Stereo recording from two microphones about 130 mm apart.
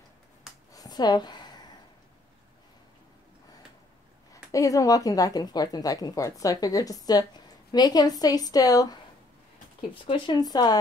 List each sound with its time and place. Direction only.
0.7 s a sound: 30° left (ahead or behind)
4.3 s speech: 25° left (ahead or behind)
9.8 s speech: 40° left (ahead or behind)